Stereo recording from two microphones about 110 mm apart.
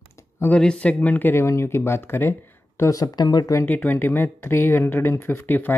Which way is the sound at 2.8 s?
30° left (ahead or behind).